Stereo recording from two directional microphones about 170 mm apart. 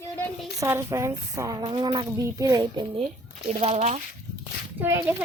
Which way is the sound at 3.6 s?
35° right (ahead or behind).